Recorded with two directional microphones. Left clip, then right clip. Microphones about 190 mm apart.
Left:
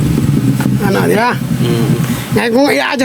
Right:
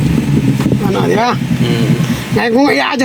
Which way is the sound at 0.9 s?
25° left (ahead or behind).